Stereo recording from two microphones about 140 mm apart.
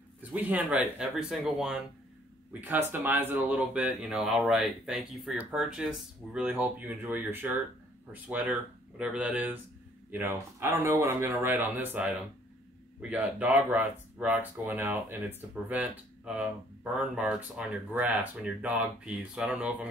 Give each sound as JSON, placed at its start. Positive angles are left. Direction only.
{"t": 0.3, "sound": "speech", "side_deg": -10}
{"t": 2.7, "sound": "speech", "side_deg": -15}